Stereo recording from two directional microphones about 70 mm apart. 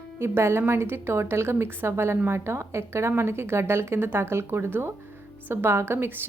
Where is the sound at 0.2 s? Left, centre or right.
Right.